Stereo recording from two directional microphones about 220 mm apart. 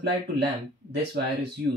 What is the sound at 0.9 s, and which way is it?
Speech, 50° right (ahead or behind).